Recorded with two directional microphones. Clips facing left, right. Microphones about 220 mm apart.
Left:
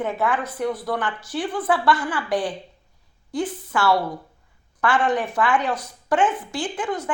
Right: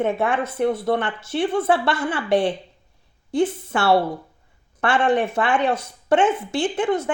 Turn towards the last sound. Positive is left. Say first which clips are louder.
# right 6 dB
turn(degrees=-25)  # may be behind; listen again after turning